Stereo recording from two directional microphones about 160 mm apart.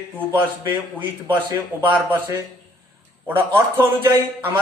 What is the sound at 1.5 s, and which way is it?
Speech, 15° right (ahead or behind).